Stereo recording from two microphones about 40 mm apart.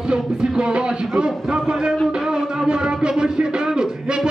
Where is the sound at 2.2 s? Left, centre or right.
Centre.